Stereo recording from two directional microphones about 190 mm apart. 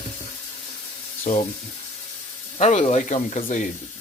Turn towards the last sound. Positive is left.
turn(degrees=40)  # may be behind; listen again after turning